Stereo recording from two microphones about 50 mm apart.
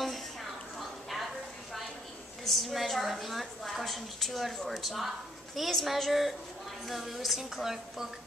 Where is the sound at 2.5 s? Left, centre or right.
Centre.